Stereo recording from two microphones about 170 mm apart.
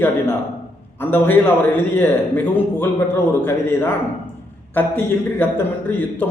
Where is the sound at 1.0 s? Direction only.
10° left (ahead or behind).